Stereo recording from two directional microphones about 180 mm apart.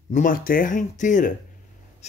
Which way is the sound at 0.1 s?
50° left (ahead or behind).